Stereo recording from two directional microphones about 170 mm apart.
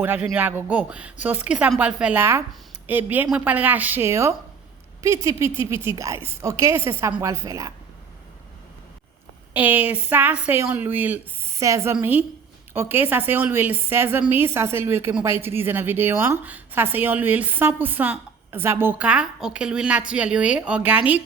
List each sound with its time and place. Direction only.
0.0 s a woman's voice: 10° right (ahead or behind)
9.5 s a woman's voice: 10° right (ahead or behind)